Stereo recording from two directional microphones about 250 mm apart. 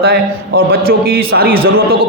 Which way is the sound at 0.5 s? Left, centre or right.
Right.